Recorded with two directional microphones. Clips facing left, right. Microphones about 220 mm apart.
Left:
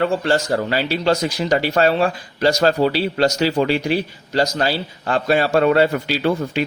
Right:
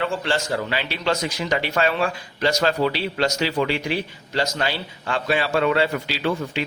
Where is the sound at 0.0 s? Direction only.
40° left (ahead or behind).